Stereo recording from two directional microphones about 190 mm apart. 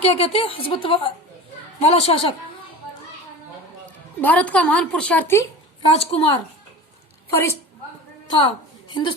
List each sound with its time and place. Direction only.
0.0 s a woman's voice: 30° left (ahead or behind)
4.2 s a woman's voice: 10° left (ahead or behind)
5.8 s a woman's voice: 30° left (ahead or behind)
7.3 s a woman's voice: 15° left (ahead or behind)
8.3 s a woman's voice: 25° left (ahead or behind)